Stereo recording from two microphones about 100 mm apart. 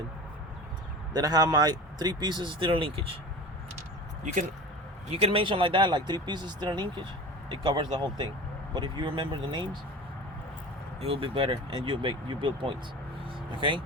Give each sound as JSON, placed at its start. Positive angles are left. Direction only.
{"t": 1.1, "sound": "speech", "side_deg": -40}
{"t": 5.1, "sound": "speech", "side_deg": -65}
{"t": 11.0, "sound": "speech", "side_deg": -70}